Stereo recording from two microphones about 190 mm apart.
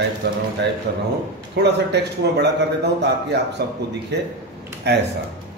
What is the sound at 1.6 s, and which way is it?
Speech, 60° right (ahead or behind).